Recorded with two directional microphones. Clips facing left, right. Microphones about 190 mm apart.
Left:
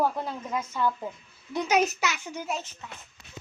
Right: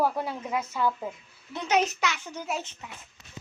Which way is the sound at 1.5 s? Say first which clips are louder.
Left 1 dB; 10° left (ahead or behind).